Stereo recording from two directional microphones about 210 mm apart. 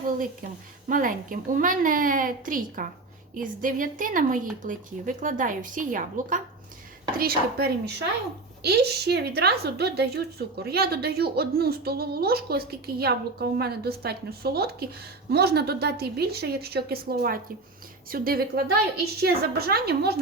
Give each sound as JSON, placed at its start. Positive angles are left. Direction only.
{"t": 0.9, "sound": "a woman's voice", "side_deg": -40}